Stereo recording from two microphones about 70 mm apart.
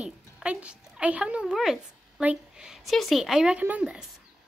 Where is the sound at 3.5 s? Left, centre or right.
Centre.